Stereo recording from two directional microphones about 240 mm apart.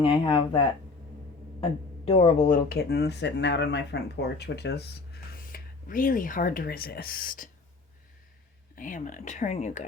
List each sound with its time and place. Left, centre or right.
0.0 s speech: left
2.0 s speech: left
8.7 s speech: left